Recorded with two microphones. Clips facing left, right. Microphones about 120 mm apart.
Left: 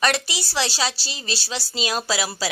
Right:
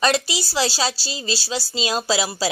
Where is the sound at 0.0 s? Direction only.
30° right (ahead or behind).